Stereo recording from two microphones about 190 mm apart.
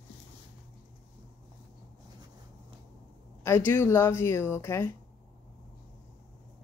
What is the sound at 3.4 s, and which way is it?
Speech, 15° left (ahead or behind).